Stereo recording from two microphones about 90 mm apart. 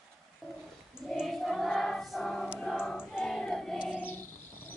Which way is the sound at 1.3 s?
Centre (ahead or behind).